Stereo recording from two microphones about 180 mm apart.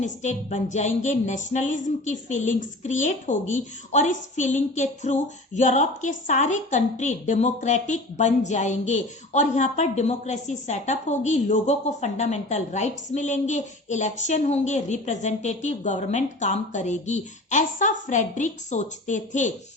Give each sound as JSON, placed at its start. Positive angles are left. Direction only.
{"t": 0.0, "sound": "music", "side_deg": 40}